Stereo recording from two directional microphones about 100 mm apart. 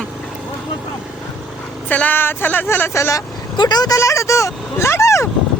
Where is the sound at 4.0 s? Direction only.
30° left (ahead or behind).